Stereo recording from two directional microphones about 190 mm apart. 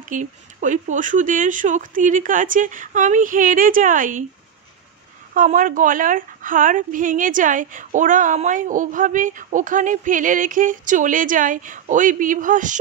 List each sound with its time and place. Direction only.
0.0 s a woman's voice: 40° right (ahead or behind)
5.3 s a woman's voice: 45° right (ahead or behind)